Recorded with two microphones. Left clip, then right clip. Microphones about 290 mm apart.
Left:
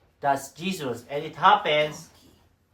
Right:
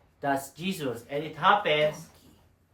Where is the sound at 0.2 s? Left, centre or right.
Centre.